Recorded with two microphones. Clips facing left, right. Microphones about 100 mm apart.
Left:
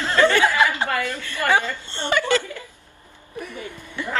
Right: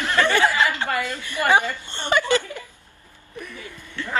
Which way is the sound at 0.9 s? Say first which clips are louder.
Left 1 dB; 15° right (ahead or behind).